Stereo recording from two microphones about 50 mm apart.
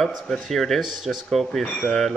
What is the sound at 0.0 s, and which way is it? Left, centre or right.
Speech, centre.